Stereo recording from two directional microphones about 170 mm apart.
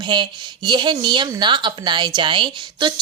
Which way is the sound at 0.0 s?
25° right (ahead or behind).